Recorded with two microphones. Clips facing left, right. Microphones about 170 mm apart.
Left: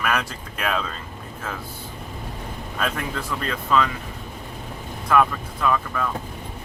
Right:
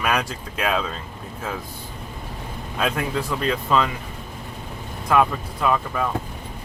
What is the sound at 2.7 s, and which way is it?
Speech, 15° right (ahead or behind).